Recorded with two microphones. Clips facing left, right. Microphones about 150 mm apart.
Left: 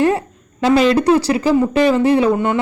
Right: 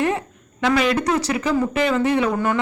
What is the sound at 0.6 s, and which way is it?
Speech, 35° left (ahead or behind).